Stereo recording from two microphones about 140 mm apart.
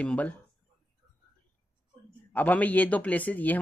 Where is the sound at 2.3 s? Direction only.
10° left (ahead or behind).